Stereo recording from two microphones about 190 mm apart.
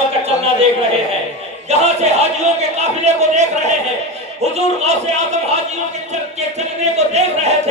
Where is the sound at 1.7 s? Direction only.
35° right (ahead or behind).